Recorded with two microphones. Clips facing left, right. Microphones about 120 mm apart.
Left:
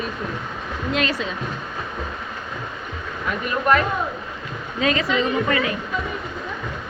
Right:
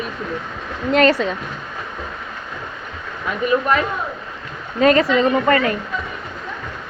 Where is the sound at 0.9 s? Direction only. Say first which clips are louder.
Right 9 dB; 60° right (ahead or behind).